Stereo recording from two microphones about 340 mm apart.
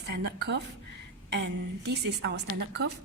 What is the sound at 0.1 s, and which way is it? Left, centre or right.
A woman's voice, right.